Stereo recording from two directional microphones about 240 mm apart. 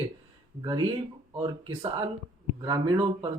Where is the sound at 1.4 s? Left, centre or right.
Centre.